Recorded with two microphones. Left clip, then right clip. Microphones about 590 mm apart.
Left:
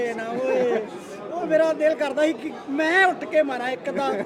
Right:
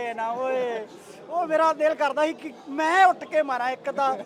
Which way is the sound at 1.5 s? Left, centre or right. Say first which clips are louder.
Left 2 dB; right.